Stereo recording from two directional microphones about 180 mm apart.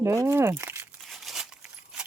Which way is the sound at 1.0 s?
Centre (ahead or behind).